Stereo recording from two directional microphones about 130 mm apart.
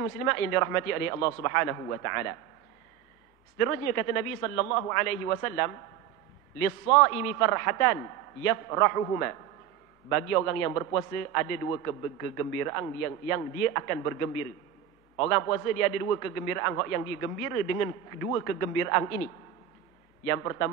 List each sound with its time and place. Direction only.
0.0 s a man's voice: 20° left (ahead or behind)
3.5 s a man's voice: 20° left (ahead or behind)
15.1 s a man's voice: 20° left (ahead or behind)
20.2 s a man's voice: 20° left (ahead or behind)